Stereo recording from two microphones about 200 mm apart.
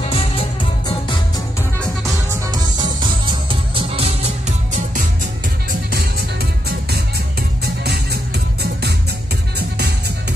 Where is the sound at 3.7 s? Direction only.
30° right (ahead or behind).